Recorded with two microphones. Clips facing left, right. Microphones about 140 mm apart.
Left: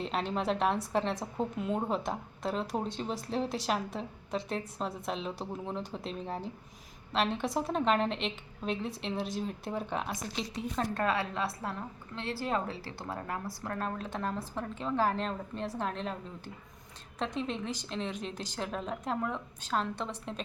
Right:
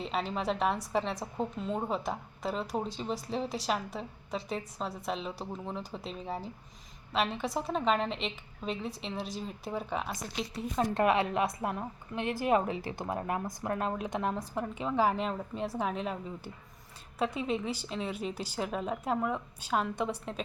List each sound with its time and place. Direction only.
0.0 s a woman's voice: centre (ahead or behind)
10.9 s a woman's voice: 20° right (ahead or behind)